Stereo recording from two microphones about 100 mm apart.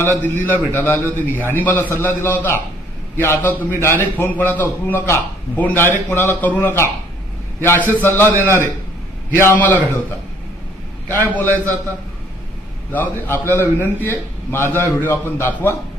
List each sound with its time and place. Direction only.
0.2 s a man's voice: 20° left (ahead or behind)
11.1 s a man's voice: 20° left (ahead or behind)
12.9 s a man's voice: 20° left (ahead or behind)